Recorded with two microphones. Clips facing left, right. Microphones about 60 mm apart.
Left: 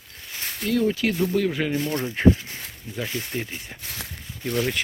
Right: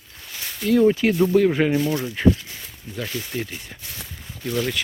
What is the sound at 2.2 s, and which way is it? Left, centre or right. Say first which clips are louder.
Speech: left 2 dB; left.